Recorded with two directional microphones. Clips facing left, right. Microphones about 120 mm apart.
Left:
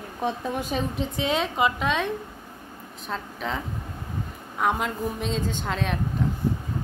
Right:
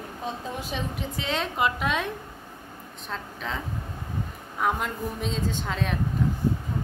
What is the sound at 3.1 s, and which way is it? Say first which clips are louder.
Speech: left 3 dB; centre (ahead or behind).